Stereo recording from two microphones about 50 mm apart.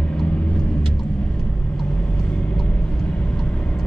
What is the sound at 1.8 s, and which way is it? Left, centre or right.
Vehicle, left.